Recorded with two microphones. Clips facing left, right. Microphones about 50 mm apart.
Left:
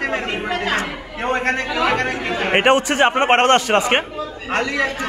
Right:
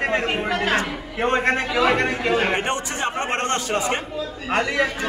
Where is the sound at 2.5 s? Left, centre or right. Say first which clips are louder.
Left 8 dB; left.